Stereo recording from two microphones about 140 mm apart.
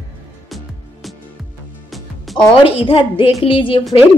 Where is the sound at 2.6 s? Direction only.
40° left (ahead or behind).